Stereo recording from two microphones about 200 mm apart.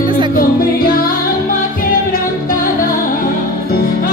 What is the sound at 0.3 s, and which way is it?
Music, 45° left (ahead or behind).